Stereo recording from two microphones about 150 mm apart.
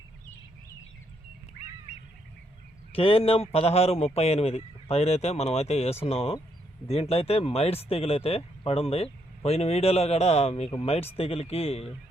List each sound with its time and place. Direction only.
2.9 s speech: 40° left (ahead or behind)